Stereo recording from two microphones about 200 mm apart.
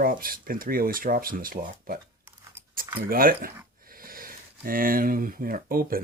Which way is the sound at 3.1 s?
45° right (ahead or behind).